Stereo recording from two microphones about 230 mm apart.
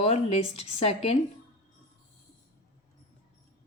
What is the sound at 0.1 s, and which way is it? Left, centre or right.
A woman's voice, left.